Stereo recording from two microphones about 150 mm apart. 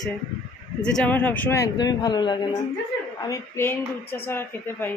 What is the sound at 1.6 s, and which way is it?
Speech, 25° left (ahead or behind).